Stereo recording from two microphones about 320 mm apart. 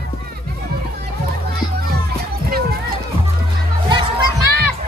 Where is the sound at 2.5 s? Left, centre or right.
Right.